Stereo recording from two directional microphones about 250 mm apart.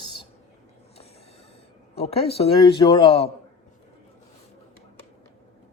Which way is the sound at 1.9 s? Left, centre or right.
Left.